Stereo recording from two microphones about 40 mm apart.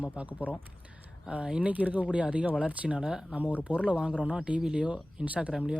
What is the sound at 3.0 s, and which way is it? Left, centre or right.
Speech, centre.